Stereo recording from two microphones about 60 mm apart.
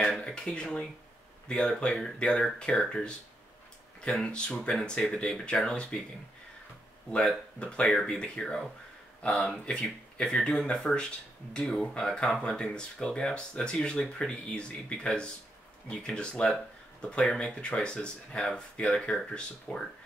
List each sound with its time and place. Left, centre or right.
0.2 s speech: centre
7.1 s speech: centre
8.1 s speech: centre
10.2 s speech: centre